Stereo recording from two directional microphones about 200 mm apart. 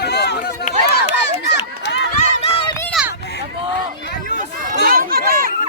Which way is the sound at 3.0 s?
Centre (ahead or behind).